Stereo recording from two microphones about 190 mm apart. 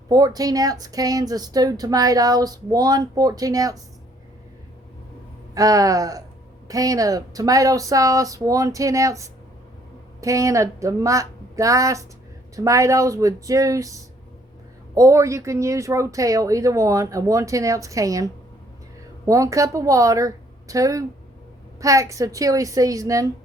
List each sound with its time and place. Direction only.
0.1 s speech: 20° right (ahead or behind)
5.5 s a woman's voice: 20° right (ahead or behind)